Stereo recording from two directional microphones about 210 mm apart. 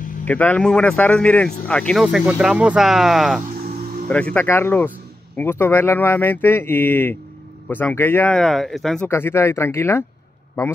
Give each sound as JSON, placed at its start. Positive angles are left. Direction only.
{"t": 0.2, "sound": "speech", "side_deg": 10}
{"t": 2.0, "sound": "speech", "side_deg": -5}
{"t": 3.4, "sound": "music", "side_deg": -40}
{"t": 4.1, "sound": "speech", "side_deg": 5}